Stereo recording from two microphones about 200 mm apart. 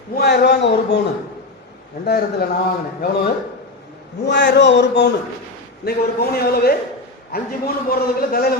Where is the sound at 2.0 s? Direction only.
50° left (ahead or behind).